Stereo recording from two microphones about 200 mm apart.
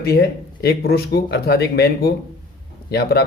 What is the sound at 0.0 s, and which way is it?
Speech, 50° left (ahead or behind).